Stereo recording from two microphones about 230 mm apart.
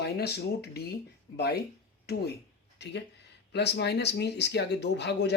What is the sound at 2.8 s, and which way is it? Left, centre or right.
Speech, left.